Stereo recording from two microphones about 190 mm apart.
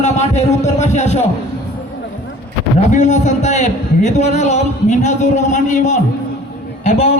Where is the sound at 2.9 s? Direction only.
40° left (ahead or behind).